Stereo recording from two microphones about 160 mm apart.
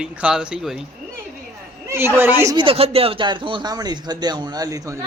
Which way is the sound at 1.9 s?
15° right (ahead or behind).